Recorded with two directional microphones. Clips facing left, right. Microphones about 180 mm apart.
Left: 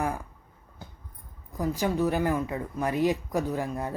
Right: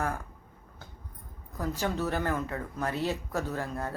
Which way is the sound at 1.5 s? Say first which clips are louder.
Left 4 dB; 10° left (ahead or behind).